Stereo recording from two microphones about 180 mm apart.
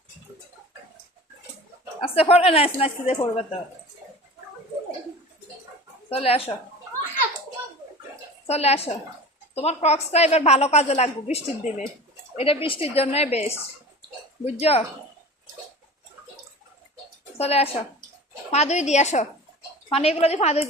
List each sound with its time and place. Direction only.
2.0 s a woman's voice: 30° left (ahead or behind)
6.1 s a woman's voice: 35° left (ahead or behind)
8.4 s a woman's voice: 35° left (ahead or behind)
17.3 s a woman's voice: 35° left (ahead or behind)